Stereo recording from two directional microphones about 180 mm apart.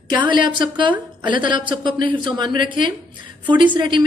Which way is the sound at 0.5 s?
25° right (ahead or behind).